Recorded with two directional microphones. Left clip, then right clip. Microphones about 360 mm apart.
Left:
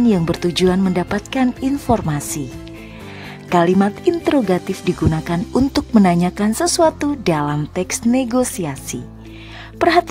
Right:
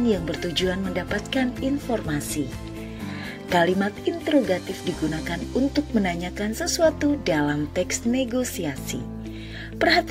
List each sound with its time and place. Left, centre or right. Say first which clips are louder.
0.1 s speech: left 6 dB; centre
3.4 s speech: left 6 dB; centre
9.8 s speech: left 6 dB; centre